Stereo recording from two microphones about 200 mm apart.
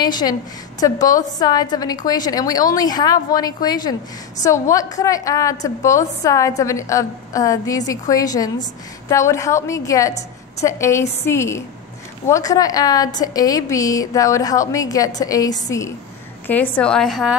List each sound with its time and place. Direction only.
0.0 s a woman's voice: 20° left (ahead or behind); by 17.4 s centre (ahead or behind)